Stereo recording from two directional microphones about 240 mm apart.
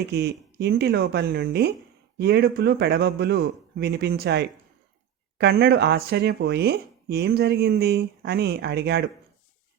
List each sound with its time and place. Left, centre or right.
0.1 s speech: right